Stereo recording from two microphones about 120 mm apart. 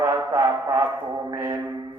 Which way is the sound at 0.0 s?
25° right (ahead or behind).